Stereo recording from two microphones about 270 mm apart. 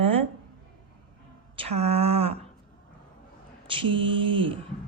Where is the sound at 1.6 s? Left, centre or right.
Right.